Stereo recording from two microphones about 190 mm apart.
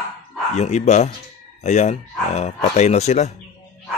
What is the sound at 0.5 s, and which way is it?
Speech, 35° left (ahead or behind).